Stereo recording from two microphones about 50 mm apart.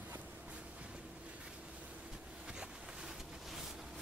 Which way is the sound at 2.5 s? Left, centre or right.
Centre.